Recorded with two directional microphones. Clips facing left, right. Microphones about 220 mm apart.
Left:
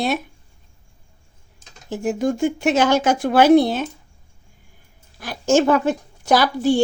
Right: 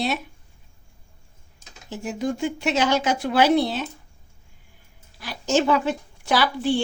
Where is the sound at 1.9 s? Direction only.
50° left (ahead or behind).